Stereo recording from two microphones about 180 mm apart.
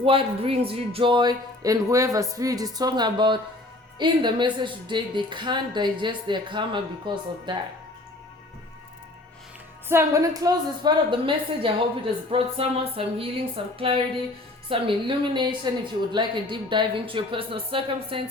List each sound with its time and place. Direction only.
0.0 s a woman's voice: 30° right (ahead or behind)
9.9 s a woman's voice: 15° right (ahead or behind)
12.3 s music: 30° right (ahead or behind)
13.7 s a woman's voice: 30° right (ahead or behind)